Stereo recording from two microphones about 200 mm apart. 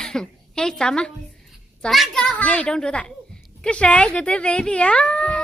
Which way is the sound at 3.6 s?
5° left (ahead or behind).